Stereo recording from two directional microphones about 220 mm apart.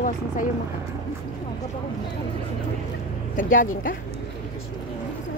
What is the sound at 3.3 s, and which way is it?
Speech, 40° left (ahead or behind).